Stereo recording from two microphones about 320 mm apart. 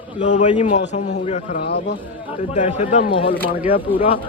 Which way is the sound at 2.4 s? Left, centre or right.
Left.